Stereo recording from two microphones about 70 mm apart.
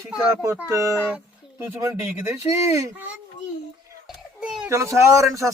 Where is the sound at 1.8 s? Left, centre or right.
Right.